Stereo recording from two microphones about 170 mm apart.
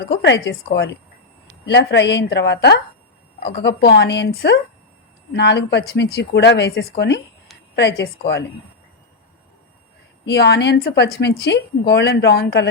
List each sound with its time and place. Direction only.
0.1 s a woman's voice: 85° left
10.2 s a woman's voice: 75° left (ahead or behind)